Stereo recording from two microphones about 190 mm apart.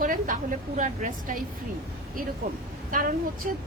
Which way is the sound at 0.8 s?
45° right (ahead or behind).